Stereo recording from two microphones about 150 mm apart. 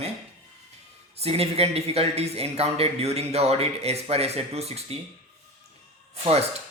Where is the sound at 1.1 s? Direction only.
45° right (ahead or behind).